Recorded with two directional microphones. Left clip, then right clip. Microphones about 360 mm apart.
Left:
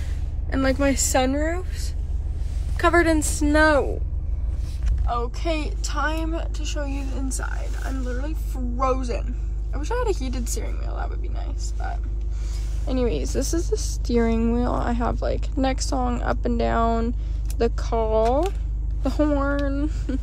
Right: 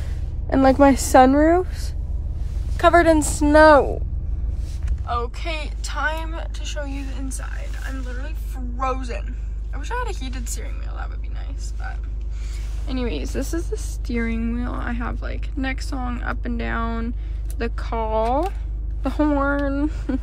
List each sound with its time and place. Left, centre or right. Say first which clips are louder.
0.5 s a woman's voice: right 7 dB; centre
2.8 s a woman's voice: right 4 dB; centre
5.0 s a woman's voice: even; centre